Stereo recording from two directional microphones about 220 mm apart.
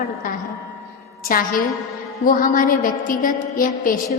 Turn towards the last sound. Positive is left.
turn(degrees=40)  # may be behind; listen again after turning